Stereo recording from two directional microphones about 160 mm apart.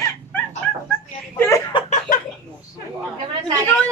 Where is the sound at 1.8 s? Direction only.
60° left (ahead or behind).